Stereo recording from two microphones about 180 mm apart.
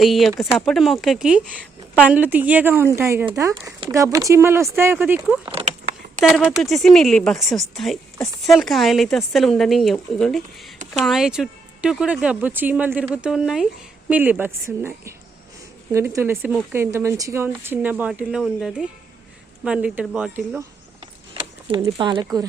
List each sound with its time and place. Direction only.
0.0 s speech: centre (ahead or behind)
5.5 s a sound: 30° right (ahead or behind)
6.2 s speech: centre (ahead or behind)
21.3 s speech: 25° right (ahead or behind)